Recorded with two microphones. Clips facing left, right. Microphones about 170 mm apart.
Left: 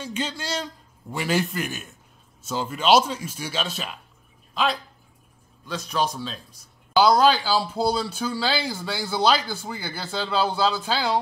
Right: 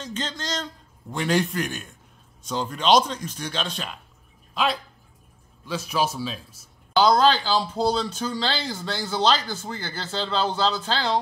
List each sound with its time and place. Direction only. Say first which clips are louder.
0.0 s speech: left 2 dB; 10° left (ahead or behind)
7.0 s speech: left 1 dB; 10° left (ahead or behind)